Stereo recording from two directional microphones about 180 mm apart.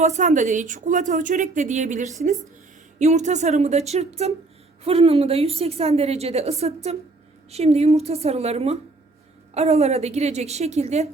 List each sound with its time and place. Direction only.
0.0 s a woman's voice: 40° right (ahead or behind)